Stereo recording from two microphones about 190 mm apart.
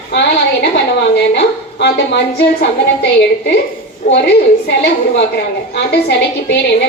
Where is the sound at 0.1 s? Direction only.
60° left (ahead or behind).